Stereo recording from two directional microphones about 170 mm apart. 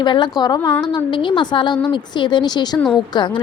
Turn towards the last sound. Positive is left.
turn(degrees=25)  # may be behind; listen again after turning